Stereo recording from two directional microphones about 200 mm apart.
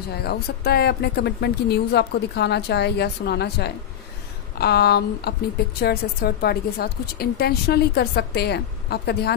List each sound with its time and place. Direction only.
0.1 s a woman's voice: 50° left (ahead or behind)